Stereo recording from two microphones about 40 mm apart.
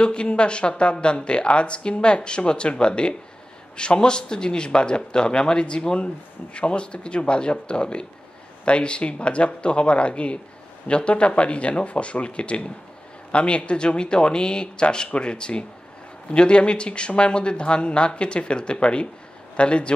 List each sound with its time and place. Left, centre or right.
0.0 s a man's voice: left